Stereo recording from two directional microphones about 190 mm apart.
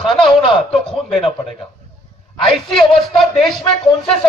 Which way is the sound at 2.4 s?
Centre (ahead or behind).